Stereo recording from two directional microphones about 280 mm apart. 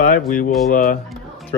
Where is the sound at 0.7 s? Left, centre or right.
Left.